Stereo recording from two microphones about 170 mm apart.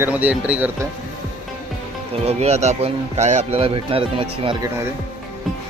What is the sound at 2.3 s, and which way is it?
Speech, 40° right (ahead or behind).